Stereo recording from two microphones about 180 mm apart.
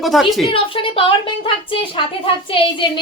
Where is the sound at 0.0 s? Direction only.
Centre (ahead or behind).